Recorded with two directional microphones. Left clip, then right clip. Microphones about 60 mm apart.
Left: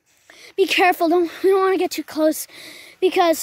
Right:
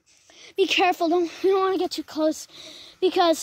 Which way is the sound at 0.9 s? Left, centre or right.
Left.